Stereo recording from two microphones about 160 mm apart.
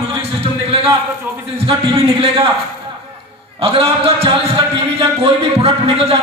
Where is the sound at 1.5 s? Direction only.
35° right (ahead or behind).